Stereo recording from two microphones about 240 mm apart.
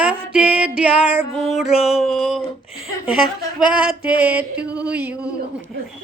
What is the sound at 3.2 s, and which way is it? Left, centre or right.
Speech, centre.